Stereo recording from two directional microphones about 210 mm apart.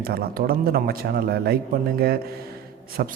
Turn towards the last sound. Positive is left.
turn(degrees=-45)  # may be behind; listen again after turning